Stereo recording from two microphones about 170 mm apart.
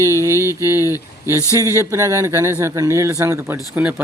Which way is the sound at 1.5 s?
15° right (ahead or behind).